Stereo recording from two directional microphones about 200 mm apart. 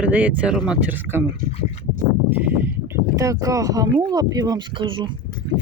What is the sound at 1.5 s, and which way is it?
Speech, 30° left (ahead or behind).